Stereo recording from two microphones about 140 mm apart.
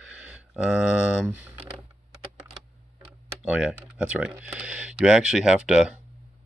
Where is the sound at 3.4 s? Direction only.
5° right (ahead or behind).